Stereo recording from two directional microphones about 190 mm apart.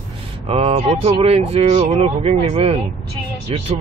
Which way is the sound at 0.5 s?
30° right (ahead or behind).